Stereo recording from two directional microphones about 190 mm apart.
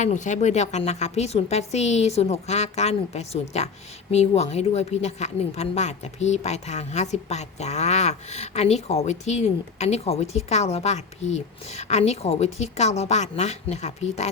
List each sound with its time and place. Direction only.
0.0 s a woman's voice: 40° left (ahead or behind)